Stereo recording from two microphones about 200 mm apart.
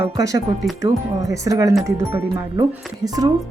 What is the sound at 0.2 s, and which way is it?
Speech, 15° right (ahead or behind).